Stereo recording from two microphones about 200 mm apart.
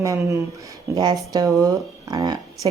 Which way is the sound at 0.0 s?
15° right (ahead or behind).